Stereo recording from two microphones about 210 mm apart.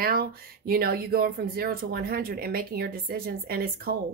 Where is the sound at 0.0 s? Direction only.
45° right (ahead or behind).